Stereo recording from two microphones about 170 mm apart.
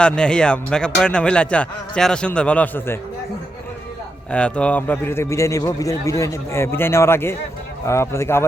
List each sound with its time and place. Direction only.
0.0 s speech: 5° left (ahead or behind)
4.3 s a man's voice: 5° left (ahead or behind)